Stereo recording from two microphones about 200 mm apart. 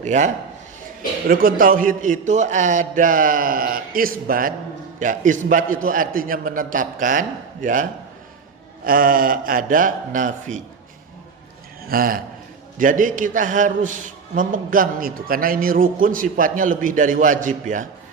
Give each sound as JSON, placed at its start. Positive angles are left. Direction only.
{"t": 0.0, "sound": "speech", "side_deg": -35}
{"t": 1.3, "sound": "a man's voice", "side_deg": -45}
{"t": 11.9, "sound": "a man's voice", "side_deg": -45}